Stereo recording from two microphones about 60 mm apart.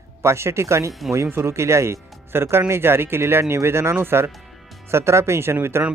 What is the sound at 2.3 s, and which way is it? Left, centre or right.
Speech, right.